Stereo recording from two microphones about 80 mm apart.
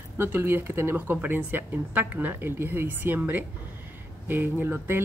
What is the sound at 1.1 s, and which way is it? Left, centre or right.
Speech, right.